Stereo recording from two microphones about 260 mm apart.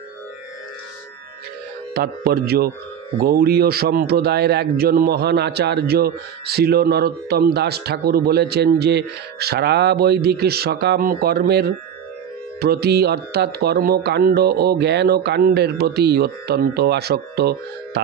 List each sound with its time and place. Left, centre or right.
2.0 s speech: right